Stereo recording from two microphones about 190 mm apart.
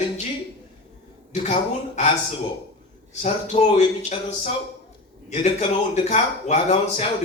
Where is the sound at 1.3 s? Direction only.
35° left (ahead or behind).